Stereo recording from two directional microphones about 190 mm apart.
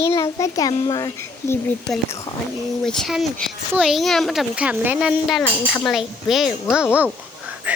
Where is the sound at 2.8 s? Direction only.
Centre (ahead or behind).